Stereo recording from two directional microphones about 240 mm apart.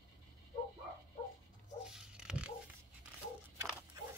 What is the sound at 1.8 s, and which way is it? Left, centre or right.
Dog, centre.